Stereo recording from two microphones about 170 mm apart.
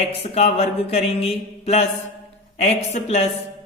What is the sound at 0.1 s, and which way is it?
Speech, 35° left (ahead or behind).